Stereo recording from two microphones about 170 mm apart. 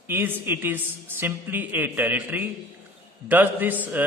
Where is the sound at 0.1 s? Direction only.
10° right (ahead or behind).